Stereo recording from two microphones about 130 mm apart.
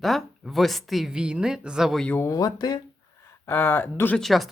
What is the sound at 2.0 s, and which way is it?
Speech, 20° left (ahead or behind).